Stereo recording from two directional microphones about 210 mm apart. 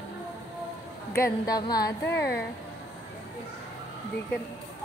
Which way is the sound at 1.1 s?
15° left (ahead or behind).